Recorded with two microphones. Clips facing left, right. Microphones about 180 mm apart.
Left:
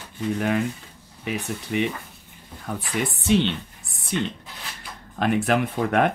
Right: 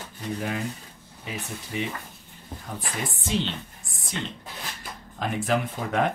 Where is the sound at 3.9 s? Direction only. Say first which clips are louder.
Left 8 dB; 60° left (ahead or behind).